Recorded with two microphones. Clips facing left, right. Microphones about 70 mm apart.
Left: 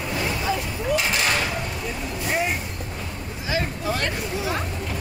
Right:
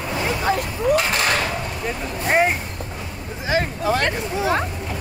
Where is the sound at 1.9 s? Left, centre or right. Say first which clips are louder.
Right 7 dB; right.